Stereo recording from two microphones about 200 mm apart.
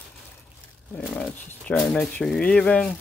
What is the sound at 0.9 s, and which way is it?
Speech, 5° left (ahead or behind).